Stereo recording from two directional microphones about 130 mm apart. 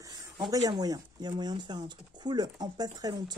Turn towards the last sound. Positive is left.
turn(degrees=-30)  # may be behind; listen again after turning